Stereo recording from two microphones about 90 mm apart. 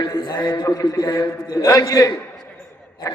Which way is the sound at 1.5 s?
35° left (ahead or behind).